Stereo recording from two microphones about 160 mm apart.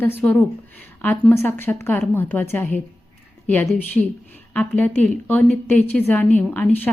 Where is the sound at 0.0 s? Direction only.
10° left (ahead or behind).